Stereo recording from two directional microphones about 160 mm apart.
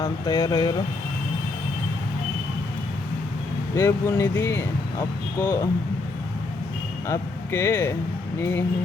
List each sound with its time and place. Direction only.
0.0 s speech: 25° left (ahead or behind)
3.8 s speech: 15° left (ahead or behind)
7.1 s speech: 15° left (ahead or behind)